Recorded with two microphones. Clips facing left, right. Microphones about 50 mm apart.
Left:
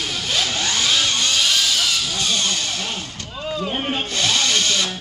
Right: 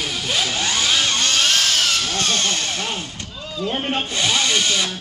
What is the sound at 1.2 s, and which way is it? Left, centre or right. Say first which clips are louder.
Vehicle: right 1 dB; right.